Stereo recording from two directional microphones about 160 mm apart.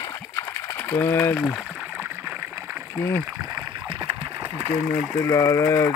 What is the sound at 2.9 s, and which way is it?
Speech, 15° left (ahead or behind).